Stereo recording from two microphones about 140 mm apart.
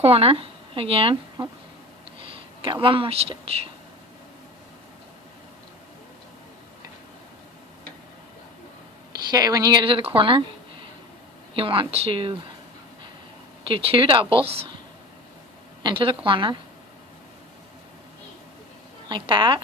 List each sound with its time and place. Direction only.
0.0 s speech: 45° right (ahead or behind)
2.3 s a sound: 40° right (ahead or behind)
2.8 s speech: 40° right (ahead or behind)
9.3 s speech: 25° right (ahead or behind)
11.5 s speech: 40° right (ahead or behind)
13.7 s speech: 40° right (ahead or behind)
15.8 s speech: 40° right (ahead or behind)
19.0 s speech: 35° right (ahead or behind)